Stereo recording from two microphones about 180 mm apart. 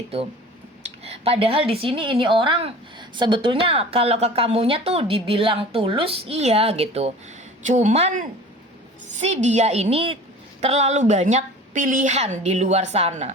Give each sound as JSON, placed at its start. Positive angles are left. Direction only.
{"t": 1.0, "sound": "a woman's voice", "side_deg": -35}